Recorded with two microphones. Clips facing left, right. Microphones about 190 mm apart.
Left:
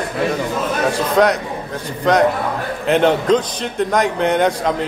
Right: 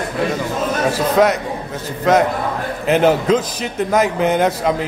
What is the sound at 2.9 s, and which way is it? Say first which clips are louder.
A man's voice: even; 5° right (ahead or behind).